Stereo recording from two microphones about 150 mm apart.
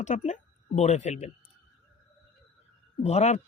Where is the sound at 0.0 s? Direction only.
50° left (ahead or behind).